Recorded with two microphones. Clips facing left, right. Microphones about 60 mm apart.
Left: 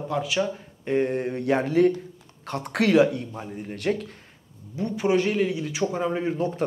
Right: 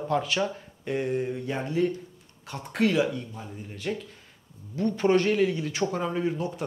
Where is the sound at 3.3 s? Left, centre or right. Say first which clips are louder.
Left 6 dB; left.